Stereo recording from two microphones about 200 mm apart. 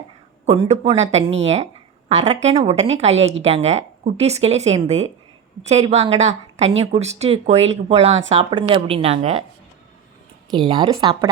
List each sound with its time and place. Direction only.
0.4 s a woman's voice: 30° right (ahead or behind)
10.5 s a woman's voice: 25° right (ahead or behind)